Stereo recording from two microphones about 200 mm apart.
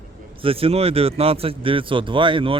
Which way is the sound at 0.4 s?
30° right (ahead or behind).